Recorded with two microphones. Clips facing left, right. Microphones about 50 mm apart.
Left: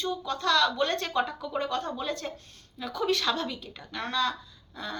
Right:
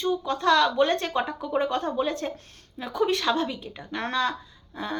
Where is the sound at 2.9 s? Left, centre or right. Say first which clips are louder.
Right 4 dB; centre.